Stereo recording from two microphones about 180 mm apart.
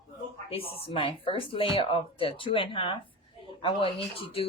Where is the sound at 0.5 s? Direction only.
30° left (ahead or behind).